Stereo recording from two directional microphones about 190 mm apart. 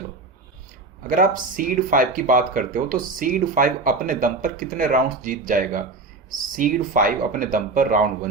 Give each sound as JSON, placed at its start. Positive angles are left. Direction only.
{"t": 1.0, "sound": "speech", "side_deg": -45}